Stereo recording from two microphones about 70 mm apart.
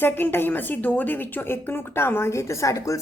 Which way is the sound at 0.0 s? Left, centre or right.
Left.